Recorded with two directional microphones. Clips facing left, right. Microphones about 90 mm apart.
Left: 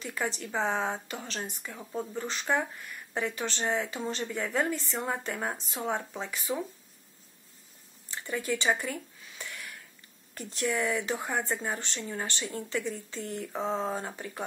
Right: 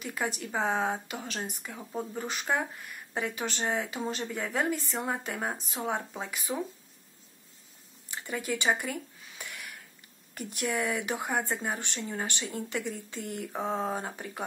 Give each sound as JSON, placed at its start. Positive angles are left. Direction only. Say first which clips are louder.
{"t": 0.0, "sound": "speech", "louder": "even", "side_deg": -10}
{"t": 8.1, "sound": "speech", "louder": "left 1 dB", "side_deg": -15}
{"t": 9.4, "sound": "a sound", "louder": "left 1 dB", "side_deg": -20}
{"t": 10.3, "sound": "speech", "louder": "left 1 dB", "side_deg": -15}